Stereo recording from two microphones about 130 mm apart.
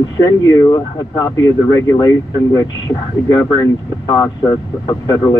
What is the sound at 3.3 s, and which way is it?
Speech, 30° left (ahead or behind).